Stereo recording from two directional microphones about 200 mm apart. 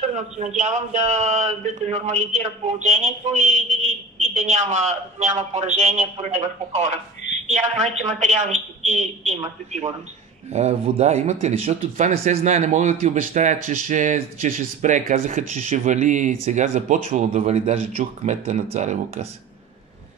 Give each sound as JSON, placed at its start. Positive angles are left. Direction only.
{"t": 0.6, "sound": "speech", "side_deg": -35}
{"t": 10.5, "sound": "speech", "side_deg": -35}